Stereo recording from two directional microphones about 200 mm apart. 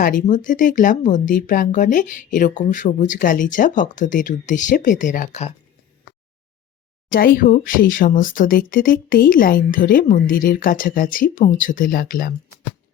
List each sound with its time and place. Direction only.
0.0 s speech: 45° left (ahead or behind)
7.1 s speech: 45° left (ahead or behind)